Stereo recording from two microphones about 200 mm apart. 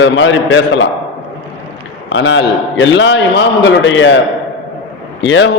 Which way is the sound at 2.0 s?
70° left (ahead or behind).